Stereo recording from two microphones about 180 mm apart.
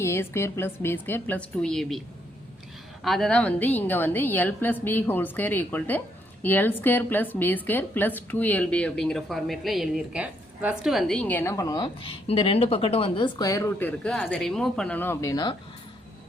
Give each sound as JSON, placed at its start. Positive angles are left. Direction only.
{"t": 0.0, "sound": "a woman's voice", "side_deg": 15}
{"t": 3.0, "sound": "a woman's voice", "side_deg": 0}